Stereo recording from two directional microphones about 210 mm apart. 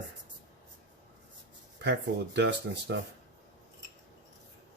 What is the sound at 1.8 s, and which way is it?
Speech, 55° right (ahead or behind).